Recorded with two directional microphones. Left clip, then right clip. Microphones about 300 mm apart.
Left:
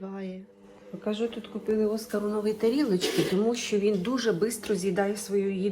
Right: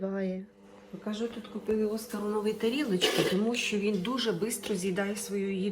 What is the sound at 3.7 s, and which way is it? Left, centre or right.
A woman's voice, centre.